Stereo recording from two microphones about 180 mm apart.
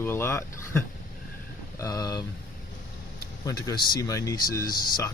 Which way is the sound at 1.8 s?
20° left (ahead or behind).